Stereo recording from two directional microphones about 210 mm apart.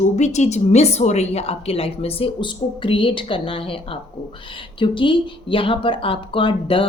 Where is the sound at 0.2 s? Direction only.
30° left (ahead or behind).